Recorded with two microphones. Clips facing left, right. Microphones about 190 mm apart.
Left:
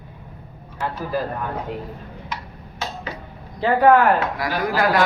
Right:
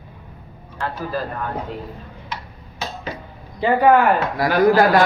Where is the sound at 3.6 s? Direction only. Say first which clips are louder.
Even; centre (ahead or behind).